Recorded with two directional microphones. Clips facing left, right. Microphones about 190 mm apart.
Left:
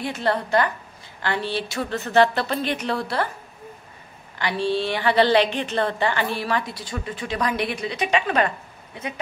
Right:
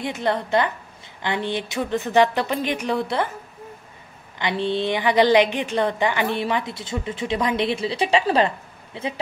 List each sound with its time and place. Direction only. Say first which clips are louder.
0.0 s a woman's voice: even; 20° right (ahead or behind)
4.4 s a woman's voice: even; 20° right (ahead or behind)